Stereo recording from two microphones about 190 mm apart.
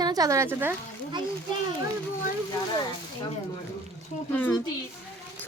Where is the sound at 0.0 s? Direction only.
20° right (ahead or behind).